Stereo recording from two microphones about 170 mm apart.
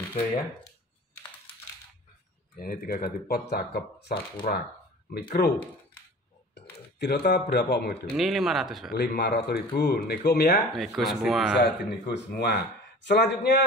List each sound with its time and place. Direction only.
2.6 s speech: 60° left (ahead or behind)
4.4 s speech: 50° left (ahead or behind)
5.4 s speech: 65° left (ahead or behind)
6.5 s a sound: 75° left (ahead or behind)
7.5 s speech: 75° left (ahead or behind)
8.2 s speech: centre (ahead or behind)
8.9 s speech: 65° left (ahead or behind)
10.7 s speech: centre (ahead or behind)
11.5 s speech: 90° left
13.0 s a man's voice: 90° left